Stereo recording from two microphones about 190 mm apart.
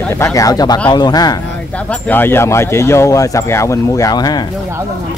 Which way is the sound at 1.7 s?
5° left (ahead or behind).